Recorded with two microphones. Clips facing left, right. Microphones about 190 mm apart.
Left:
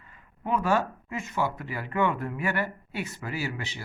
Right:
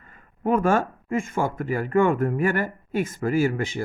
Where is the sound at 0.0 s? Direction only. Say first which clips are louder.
Right 10 dB; 50° right (ahead or behind).